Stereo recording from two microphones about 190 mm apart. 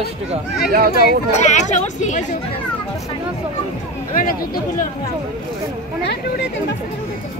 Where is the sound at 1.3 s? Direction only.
40° left (ahead or behind).